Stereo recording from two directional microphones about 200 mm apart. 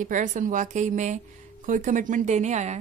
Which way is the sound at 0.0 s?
40° right (ahead or behind).